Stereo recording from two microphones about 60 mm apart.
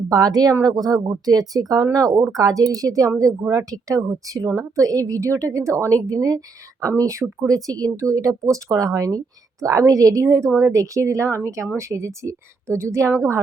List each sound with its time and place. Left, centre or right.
0.1 s a woman's voice: right
6.8 s speech: right
7.4 s a woman's voice: right
9.6 s a woman's voice: right